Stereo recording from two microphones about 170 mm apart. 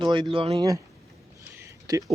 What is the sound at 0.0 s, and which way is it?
Speech, 30° right (ahead or behind).